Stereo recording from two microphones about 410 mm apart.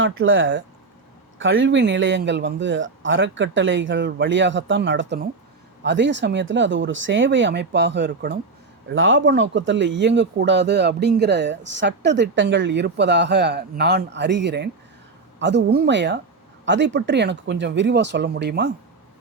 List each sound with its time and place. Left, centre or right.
0.0 s speech: right